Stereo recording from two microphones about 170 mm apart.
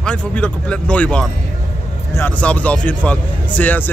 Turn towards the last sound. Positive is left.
turn(degrees=10)  # may be behind; listen again after turning